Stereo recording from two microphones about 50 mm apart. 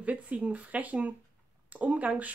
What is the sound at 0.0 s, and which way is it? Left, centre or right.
A woman's voice, right.